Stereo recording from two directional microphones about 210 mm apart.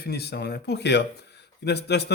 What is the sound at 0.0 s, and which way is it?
Speech, 50° left (ahead or behind).